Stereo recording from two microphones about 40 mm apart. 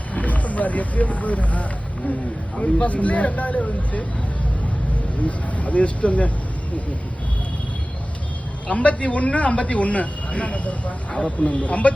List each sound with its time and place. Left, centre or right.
0.1 s a man's voice: left
5.2 s a man's voice: left
8.6 s a man's voice: left